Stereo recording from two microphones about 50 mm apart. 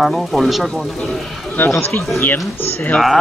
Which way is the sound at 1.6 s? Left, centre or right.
Left.